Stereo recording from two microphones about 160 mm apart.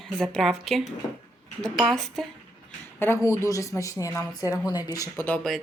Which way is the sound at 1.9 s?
Centre (ahead or behind).